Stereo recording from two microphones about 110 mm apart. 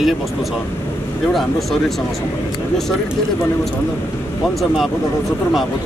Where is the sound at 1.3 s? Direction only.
Centre (ahead or behind).